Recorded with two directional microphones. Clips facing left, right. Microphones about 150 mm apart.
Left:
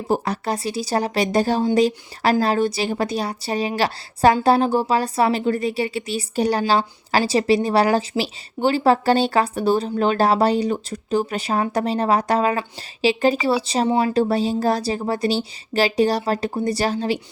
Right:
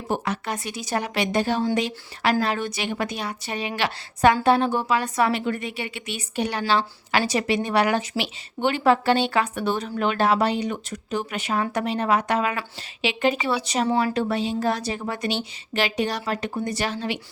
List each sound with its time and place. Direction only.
0.1 s a woman's voice: 35° left (ahead or behind)